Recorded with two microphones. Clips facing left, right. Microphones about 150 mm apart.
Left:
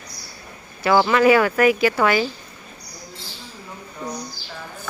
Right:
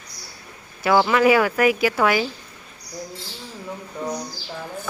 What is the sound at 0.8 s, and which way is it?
Speech, 5° right (ahead or behind).